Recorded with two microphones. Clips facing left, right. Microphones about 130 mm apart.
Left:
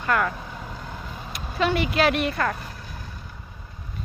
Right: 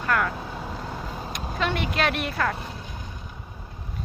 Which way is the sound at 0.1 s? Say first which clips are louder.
Left 2 dB; 5° left (ahead or behind).